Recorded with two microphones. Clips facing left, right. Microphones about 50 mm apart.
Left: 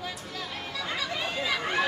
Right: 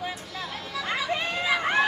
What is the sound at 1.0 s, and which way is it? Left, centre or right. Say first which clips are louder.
Chatter: right 4 dB; right.